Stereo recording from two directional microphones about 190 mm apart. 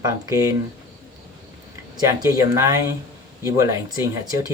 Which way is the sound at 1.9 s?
20° right (ahead or behind).